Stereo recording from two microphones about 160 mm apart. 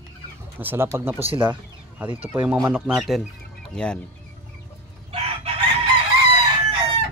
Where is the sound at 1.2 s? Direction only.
35° right (ahead or behind).